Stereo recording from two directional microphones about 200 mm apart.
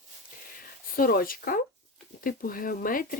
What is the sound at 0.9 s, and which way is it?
Speech, 45° left (ahead or behind).